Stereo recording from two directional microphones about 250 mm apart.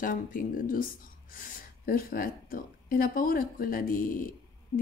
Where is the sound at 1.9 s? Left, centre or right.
Left.